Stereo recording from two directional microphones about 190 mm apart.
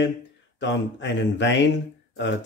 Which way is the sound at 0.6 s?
70° left (ahead or behind).